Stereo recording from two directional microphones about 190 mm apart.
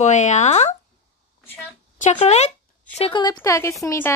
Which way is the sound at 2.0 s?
40° left (ahead or behind).